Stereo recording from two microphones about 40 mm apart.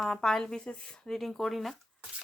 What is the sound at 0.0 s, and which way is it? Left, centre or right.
Speech, centre.